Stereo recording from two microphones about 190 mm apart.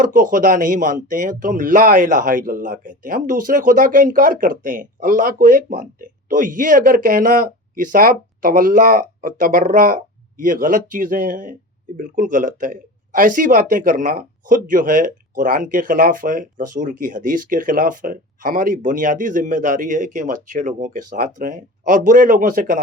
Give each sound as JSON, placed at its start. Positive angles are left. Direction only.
{"t": 0.0, "sound": "speech", "side_deg": -45}